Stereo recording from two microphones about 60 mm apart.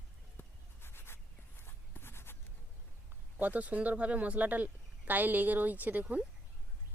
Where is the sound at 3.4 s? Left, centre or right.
Right.